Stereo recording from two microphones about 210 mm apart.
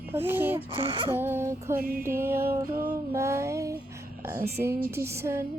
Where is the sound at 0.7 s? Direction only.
25° right (ahead or behind).